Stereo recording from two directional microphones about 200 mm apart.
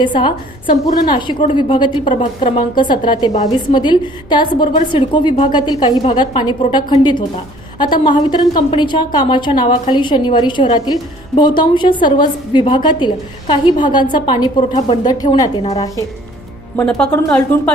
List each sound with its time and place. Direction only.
0.0 s a woman's voice: 25° left (ahead or behind)
0.7 s a woman's voice: 45° left (ahead or behind)
1.5 s a woman's voice: 25° left (ahead or behind)
16.7 s a woman's voice: 5° left (ahead or behind)